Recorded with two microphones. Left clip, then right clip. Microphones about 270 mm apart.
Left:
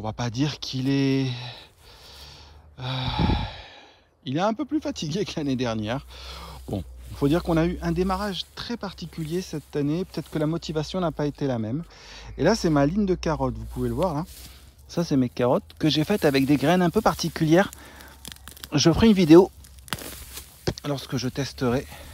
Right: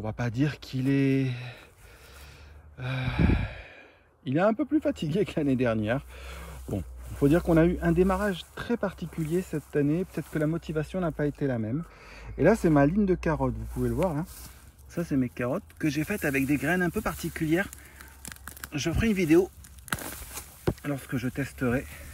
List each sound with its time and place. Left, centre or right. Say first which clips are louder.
0.0 s speech: left 2 dB; centre
2.8 s speech: left 4 dB; centre
20.0 s a sound: even; centre
20.8 s speech: left 4 dB; centre